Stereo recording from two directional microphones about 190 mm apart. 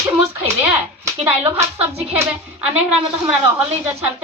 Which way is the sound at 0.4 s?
15° right (ahead or behind).